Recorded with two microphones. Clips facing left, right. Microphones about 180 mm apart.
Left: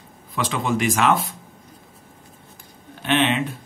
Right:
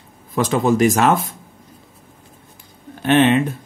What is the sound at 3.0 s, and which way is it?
Speech, 45° right (ahead or behind).